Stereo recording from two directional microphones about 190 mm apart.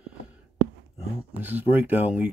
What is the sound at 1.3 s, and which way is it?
Speech, 10° right (ahead or behind).